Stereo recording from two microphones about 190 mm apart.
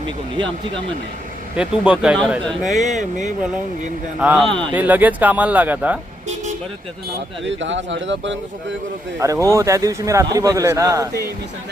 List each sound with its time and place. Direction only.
1.5 s speech: 5° right (ahead or behind)
2.8 s speech: 40° right (ahead or behind)
4.2 s a man's voice: 5° right (ahead or behind)
7.4 s speech: 75° right (ahead or behind)
9.1 s a man's voice: 15° right (ahead or behind)